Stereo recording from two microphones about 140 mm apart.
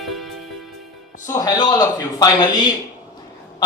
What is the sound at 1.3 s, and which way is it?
A man's voice, 25° left (ahead or behind).